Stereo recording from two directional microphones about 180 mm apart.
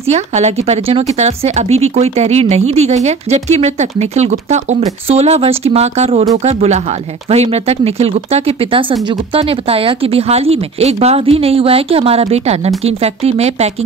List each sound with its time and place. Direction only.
0.1 s speech: 40° right (ahead or behind)